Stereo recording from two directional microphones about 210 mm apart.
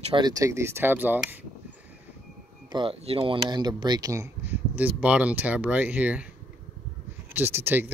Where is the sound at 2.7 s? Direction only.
25° right (ahead or behind); by 6.2 s 5° right (ahead or behind).